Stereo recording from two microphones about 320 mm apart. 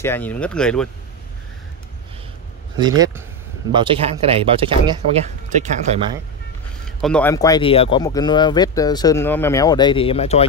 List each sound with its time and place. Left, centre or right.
0.0 s speech: centre
2.8 s speech: centre
7.0 s speech: centre